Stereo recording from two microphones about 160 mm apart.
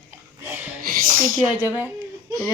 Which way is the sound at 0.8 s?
65° right (ahead or behind).